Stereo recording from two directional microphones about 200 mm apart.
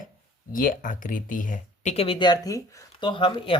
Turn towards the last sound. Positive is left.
turn(degrees=25)  # may be behind; listen again after turning